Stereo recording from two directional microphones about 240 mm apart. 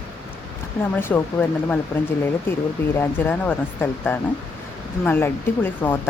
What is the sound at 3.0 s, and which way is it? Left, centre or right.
Speech, centre.